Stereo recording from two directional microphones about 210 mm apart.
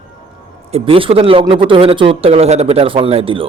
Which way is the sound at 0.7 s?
25° right (ahead or behind).